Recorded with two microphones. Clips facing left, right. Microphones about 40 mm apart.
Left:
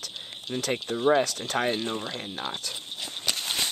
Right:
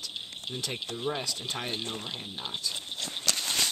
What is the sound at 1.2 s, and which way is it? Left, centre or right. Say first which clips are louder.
Speech: left 7 dB; left.